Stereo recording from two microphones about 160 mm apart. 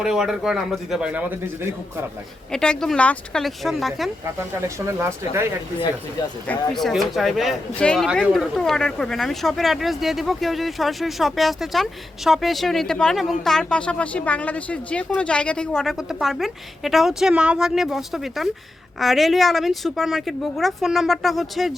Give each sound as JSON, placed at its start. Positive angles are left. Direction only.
{"t": 0.0, "sound": "speech", "side_deg": -5}
{"t": 2.5, "sound": "speech", "side_deg": 5}
{"t": 4.9, "sound": "speech", "side_deg": -15}
{"t": 6.5, "sound": "speech", "side_deg": 0}